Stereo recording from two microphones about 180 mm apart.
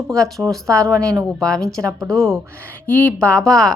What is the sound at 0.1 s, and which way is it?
Speech, 5° left (ahead or behind).